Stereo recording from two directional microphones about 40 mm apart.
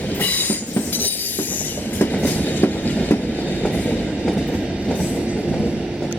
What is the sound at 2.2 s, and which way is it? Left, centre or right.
Train, left.